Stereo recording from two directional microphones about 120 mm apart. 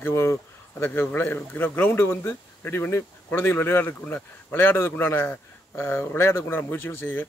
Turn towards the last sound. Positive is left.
turn(degrees=20)  # may be behind; listen again after turning